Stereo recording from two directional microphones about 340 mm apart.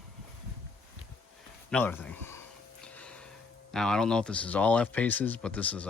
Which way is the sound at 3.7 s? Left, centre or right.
Centre.